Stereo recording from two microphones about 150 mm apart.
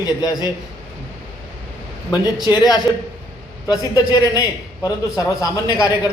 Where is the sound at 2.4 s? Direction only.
25° left (ahead or behind).